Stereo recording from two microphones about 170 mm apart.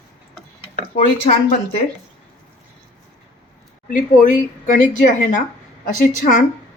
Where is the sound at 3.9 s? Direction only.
50° left (ahead or behind).